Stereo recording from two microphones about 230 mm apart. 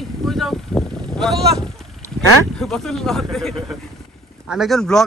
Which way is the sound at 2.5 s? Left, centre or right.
Centre.